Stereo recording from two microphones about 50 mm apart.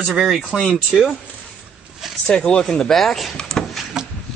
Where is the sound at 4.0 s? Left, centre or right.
Centre.